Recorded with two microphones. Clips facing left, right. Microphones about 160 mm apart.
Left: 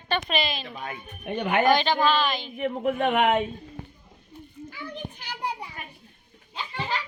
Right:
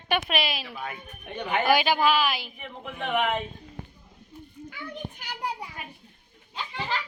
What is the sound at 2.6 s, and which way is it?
Speech, 55° left (ahead or behind).